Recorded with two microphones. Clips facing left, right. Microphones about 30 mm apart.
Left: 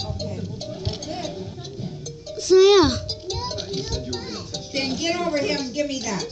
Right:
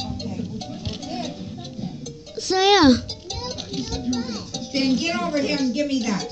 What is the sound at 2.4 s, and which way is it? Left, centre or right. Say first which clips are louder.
Music: left 2 dB; right.